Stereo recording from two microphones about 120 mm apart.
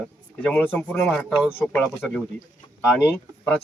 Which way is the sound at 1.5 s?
15° left (ahead or behind).